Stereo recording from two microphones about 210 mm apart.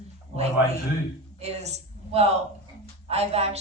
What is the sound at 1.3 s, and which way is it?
A woman's voice, 30° right (ahead or behind).